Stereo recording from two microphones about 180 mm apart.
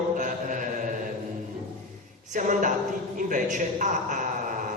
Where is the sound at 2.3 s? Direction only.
45° right (ahead or behind).